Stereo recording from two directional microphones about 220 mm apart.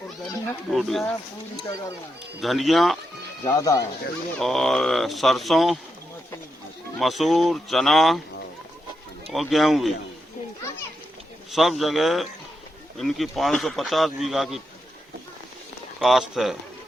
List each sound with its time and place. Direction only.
0.7 s speech: centre (ahead or behind)
2.4 s speech: centre (ahead or behind)
3.4 s speech: 15° left (ahead or behind)
4.4 s speech: centre (ahead or behind)
7.0 s speech: centre (ahead or behind)
9.3 s speech: centre (ahead or behind)
11.5 s speech: centre (ahead or behind)
16.0 s speech: centre (ahead or behind)